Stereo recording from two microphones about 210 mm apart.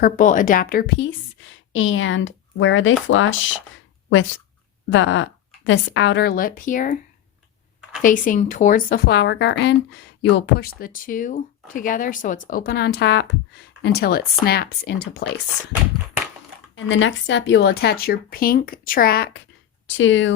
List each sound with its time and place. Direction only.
0.0 s a woman's voice: 40° left (ahead or behind)
8.0 s a woman's voice: 40° left (ahead or behind)
16.7 s speech: 65° left (ahead or behind); by 19.4 s 45° left (ahead or behind)
20.0 s a woman's voice: 65° left (ahead or behind)